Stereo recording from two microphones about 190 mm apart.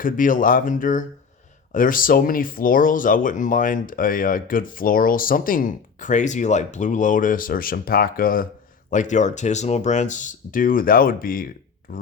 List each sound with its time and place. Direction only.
0.0 s speech: 45° left (ahead or behind)